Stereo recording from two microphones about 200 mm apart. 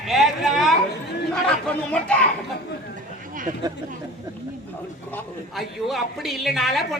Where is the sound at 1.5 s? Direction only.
5° left (ahead or behind).